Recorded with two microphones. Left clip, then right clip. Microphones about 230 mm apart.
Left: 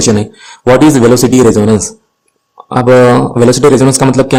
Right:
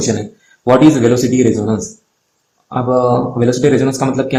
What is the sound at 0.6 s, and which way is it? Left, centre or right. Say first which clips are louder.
Speech: left 4 dB; left.